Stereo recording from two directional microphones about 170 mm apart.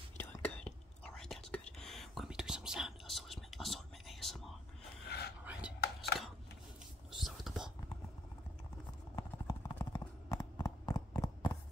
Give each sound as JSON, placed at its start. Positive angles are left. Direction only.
{"t": 0.2, "sound": "whispering", "side_deg": 10}
{"t": 5.8, "sound": "a sound", "side_deg": 70}
{"t": 7.1, "sound": "whispering", "side_deg": 0}
{"t": 9.1, "sound": "clip-clop", "side_deg": 20}